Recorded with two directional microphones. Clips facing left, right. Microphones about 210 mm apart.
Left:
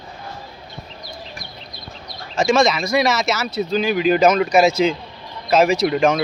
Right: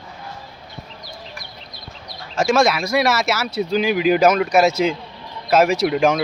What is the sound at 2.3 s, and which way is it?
Speech, 5° right (ahead or behind).